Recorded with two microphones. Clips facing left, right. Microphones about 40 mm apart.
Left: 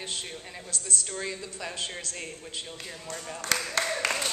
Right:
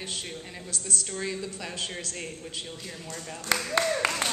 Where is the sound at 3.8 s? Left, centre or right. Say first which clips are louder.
Right 3 dB; centre.